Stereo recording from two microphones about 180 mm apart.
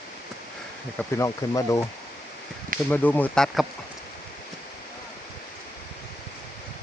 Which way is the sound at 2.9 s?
10° left (ahead or behind).